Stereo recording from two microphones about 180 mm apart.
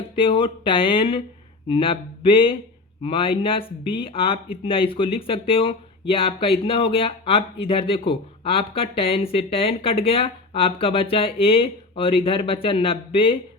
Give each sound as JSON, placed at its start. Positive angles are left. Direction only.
{"t": 0.2, "sound": "speech", "side_deg": 30}